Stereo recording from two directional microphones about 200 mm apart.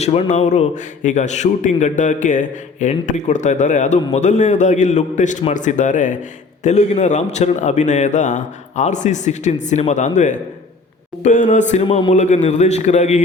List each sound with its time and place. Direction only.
0.0 s a man's voice: 35° left (ahead or behind)